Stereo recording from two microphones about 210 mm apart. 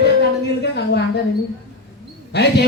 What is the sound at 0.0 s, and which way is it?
Speech, 55° left (ahead or behind).